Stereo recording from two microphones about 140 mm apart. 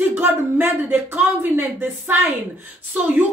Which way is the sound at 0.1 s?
15° right (ahead or behind).